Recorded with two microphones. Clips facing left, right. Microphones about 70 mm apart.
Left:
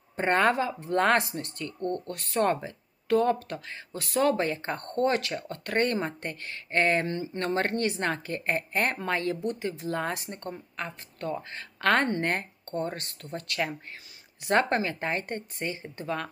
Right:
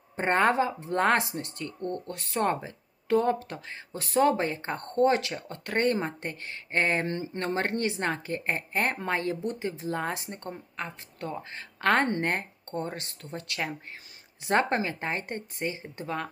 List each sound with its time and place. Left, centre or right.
0.2 s a woman's voice: right
16.0 s a woman's voice: centre